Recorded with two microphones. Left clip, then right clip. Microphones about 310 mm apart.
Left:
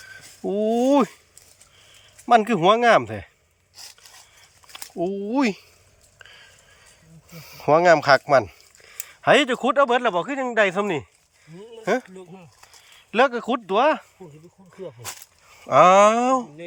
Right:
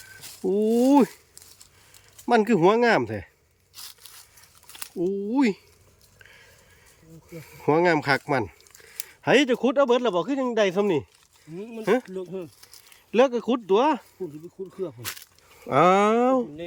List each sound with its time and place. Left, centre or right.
0.4 s a sound: centre
2.2 s speech: centre
4.9 s speech: centre
7.4 s speech: centre
12.1 s speech: right
13.1 s speech: centre
15.6 s speech: centre